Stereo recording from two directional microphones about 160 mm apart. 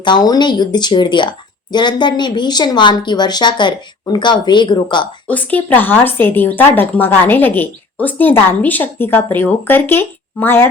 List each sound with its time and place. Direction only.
0.0 s a woman's voice: 25° left (ahead or behind)
5.3 s speech: 10° left (ahead or behind)